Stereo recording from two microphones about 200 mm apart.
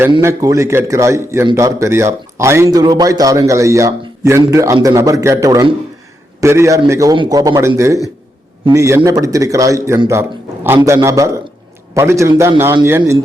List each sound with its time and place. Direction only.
0.2 s a man's voice: 15° right (ahead or behind)